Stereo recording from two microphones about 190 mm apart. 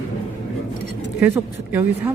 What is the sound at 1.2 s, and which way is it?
Speech, 10° right (ahead or behind).